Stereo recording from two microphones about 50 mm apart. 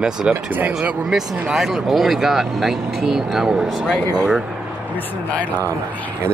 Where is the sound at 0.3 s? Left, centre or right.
Right.